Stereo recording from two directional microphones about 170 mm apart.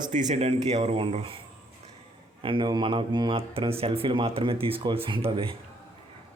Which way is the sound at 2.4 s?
30° right (ahead or behind).